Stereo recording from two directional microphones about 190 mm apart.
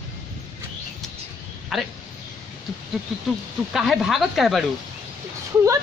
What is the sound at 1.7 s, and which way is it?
Speech, centre (ahead or behind).